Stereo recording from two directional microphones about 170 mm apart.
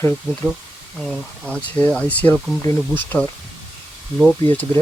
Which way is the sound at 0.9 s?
Centre (ahead or behind).